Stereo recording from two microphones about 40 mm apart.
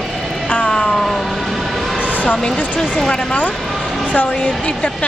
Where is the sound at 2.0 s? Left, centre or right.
Right.